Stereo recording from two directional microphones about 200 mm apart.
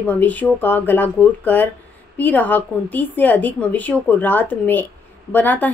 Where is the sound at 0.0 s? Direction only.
10° left (ahead or behind).